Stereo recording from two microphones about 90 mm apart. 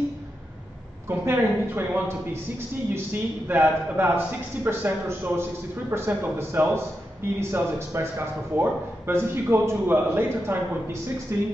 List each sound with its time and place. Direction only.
1.0 s a man's voice: 25° right (ahead or behind)